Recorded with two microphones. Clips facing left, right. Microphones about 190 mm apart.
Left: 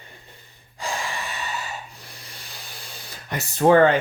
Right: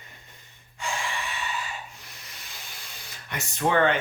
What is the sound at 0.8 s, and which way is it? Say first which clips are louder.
Gasp: left 3 dB; 35° left (ahead or behind).